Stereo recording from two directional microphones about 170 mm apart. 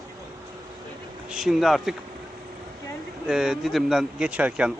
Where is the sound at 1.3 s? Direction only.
5° right (ahead or behind).